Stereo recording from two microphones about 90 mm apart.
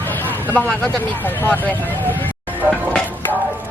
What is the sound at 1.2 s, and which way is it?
Speech, 20° left (ahead or behind).